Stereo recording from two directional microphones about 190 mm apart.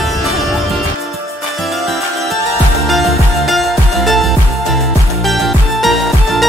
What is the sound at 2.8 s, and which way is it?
Music, centre (ahead or behind).